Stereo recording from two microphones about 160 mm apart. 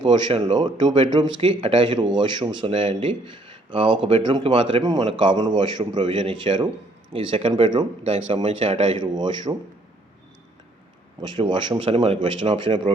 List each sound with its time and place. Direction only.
0.0 s speech: 35° right (ahead or behind)
11.2 s speech: 30° right (ahead or behind)